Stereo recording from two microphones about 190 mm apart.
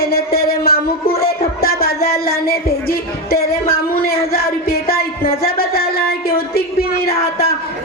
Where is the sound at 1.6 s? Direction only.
55° left (ahead or behind).